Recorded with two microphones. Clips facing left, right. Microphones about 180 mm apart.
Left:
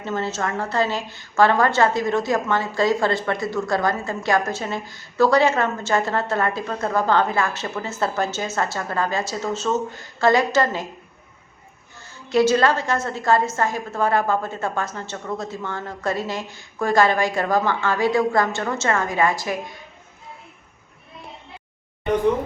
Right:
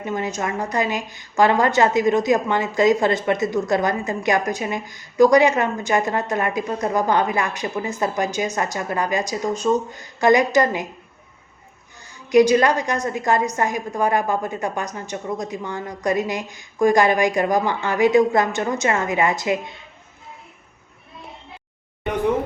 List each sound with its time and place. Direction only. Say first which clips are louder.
0.0 s a woman's voice: right 1 dB; 15° right (ahead or behind)
11.9 s a woman's voice: right 4 dB; 15° right (ahead or behind)